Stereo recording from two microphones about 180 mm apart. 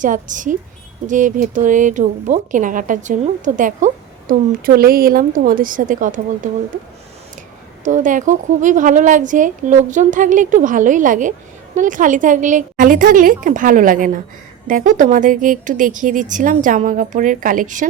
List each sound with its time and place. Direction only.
0.0 s speech: 45° right (ahead or behind)
7.9 s speech: 45° right (ahead or behind)